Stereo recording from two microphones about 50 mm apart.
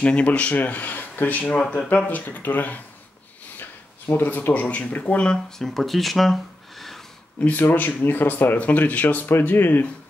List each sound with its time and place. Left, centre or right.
0.0 s speech: left
1.5 s speech: left
3.5 s a sound: left
4.6 s speech: left
5.6 s speech: centre
7.5 s speech: left